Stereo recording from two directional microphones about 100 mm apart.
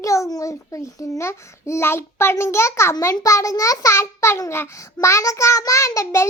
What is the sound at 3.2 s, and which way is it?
Child singing, 35° left (ahead or behind).